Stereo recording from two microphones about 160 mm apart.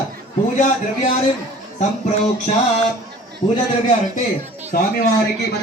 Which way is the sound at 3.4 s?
40° left (ahead or behind).